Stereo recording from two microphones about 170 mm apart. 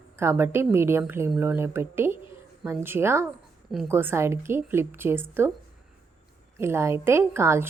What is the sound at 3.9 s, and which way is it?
Speech, 15° right (ahead or behind).